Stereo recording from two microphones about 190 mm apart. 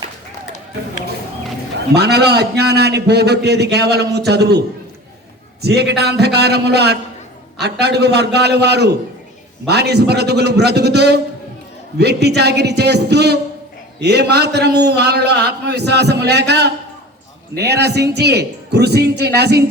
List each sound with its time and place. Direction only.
1.9 s a man's voice: 60° right (ahead or behind)
5.6 s a man's voice: 60° right (ahead or behind)